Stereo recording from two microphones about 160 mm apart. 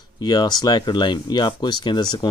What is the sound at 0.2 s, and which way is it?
Speech, 25° left (ahead or behind).